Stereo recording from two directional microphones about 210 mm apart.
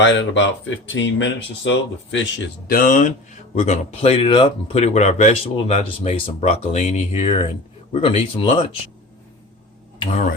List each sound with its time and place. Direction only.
0.0 s speech: 65° left (ahead or behind)
2.6 s speech: 40° left (ahead or behind); by 8.4 s 25° left (ahead or behind)
10.0 s speech: 30° left (ahead or behind)